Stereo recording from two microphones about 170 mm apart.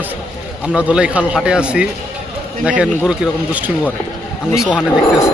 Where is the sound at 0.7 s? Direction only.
5° right (ahead or behind).